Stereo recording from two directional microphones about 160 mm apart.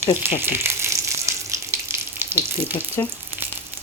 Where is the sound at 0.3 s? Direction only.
15° right (ahead or behind).